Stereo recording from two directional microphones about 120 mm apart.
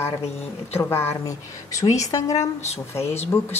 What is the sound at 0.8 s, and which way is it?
A woman's voice, 20° left (ahead or behind).